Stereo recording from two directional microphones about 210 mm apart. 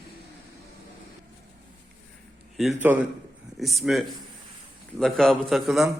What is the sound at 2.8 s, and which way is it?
A man's voice, 10° right (ahead or behind).